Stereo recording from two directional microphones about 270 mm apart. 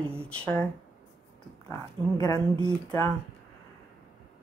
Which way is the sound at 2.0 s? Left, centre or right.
Centre.